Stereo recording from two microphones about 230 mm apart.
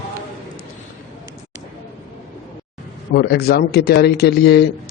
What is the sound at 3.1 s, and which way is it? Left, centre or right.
A man's voice, left.